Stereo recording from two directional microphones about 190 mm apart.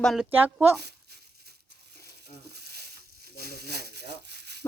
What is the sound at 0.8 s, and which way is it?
Crumpling, 60° right (ahead or behind).